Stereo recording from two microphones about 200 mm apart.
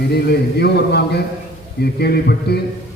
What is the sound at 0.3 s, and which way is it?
A man's voice, 55° left (ahead or behind).